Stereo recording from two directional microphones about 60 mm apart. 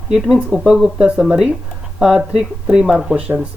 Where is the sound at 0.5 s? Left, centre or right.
Centre.